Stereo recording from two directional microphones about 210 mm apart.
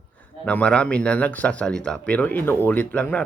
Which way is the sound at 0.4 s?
5° left (ahead or behind).